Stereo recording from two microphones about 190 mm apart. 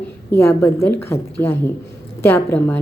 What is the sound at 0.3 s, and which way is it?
A woman's voice, 15° left (ahead or behind).